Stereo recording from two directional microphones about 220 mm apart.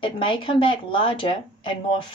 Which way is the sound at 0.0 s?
25° left (ahead or behind).